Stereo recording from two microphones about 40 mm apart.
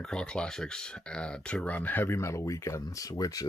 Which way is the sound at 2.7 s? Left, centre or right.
Left.